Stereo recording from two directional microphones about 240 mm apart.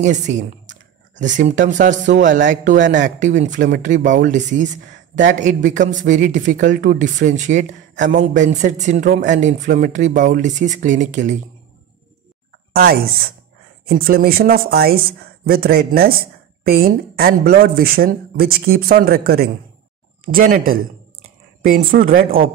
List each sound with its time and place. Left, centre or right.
0.0 s speech: right
12.7 s speech: right